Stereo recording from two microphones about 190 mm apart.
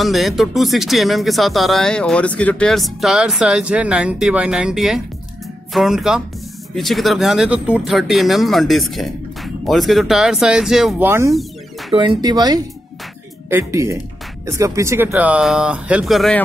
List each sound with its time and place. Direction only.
0.0 s speech: centre (ahead or behind)
11.0 s speech: 15° right (ahead or behind)
11.9 s speech: 25° right (ahead or behind); by 16.4 s centre (ahead or behind)